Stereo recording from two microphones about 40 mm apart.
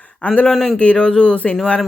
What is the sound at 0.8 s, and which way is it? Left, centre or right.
Speech, left.